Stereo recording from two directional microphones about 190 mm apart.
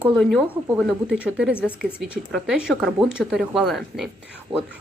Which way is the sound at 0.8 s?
5° right (ahead or behind).